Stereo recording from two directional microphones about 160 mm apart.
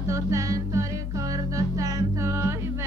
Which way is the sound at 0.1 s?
20° right (ahead or behind).